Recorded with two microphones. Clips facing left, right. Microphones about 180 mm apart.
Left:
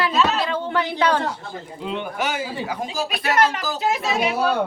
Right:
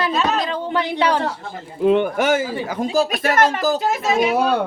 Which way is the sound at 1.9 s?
55° right (ahead or behind).